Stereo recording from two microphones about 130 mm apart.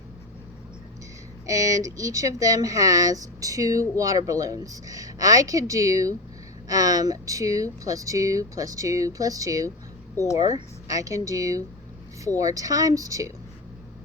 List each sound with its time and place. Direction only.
1.5 s speech: 25° right (ahead or behind)
10.3 s speech: 55° left (ahead or behind)
10.8 s speech: 25° right (ahead or behind)